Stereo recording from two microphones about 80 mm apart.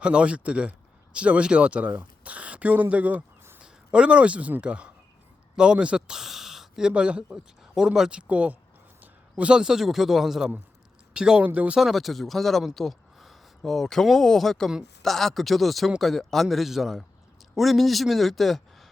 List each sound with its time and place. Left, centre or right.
0.0 s speech: centre
11.8 s speech: centre